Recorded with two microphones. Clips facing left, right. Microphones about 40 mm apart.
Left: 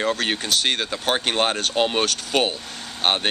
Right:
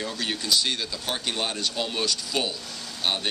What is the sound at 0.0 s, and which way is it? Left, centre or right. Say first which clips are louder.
Speech: left 7 dB; left.